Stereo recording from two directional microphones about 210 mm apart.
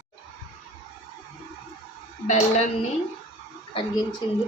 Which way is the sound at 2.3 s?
35° left (ahead or behind).